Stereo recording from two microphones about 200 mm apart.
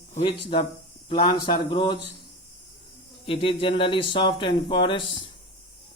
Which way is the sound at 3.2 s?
30° left (ahead or behind).